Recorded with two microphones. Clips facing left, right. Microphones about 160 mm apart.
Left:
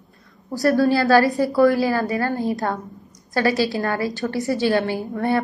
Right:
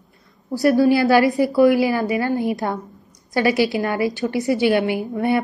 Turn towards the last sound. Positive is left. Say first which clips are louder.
# right 2 dB
turn(degrees=-15)  # may be behind; listen again after turning